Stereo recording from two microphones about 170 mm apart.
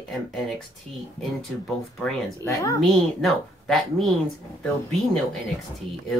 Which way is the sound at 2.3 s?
20° left (ahead or behind).